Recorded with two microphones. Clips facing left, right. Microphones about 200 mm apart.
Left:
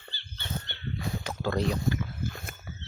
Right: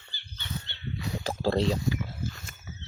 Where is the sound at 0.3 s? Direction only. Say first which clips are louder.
Left 1 dB; 50° left (ahead or behind).